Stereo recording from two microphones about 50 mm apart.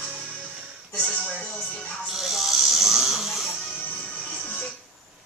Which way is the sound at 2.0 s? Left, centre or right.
Centre.